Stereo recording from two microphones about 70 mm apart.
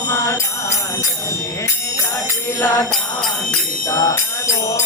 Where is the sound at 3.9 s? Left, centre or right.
Left.